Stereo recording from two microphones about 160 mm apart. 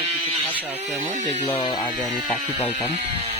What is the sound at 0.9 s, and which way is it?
Speech, 50° right (ahead or behind).